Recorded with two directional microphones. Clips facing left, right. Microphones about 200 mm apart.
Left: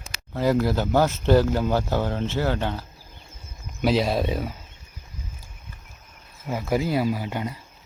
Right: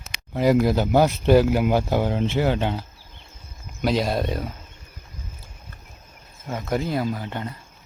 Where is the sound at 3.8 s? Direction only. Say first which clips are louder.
Left 1 dB; centre (ahead or behind).